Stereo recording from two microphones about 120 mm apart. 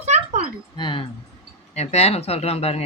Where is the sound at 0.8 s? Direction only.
40° left (ahead or behind).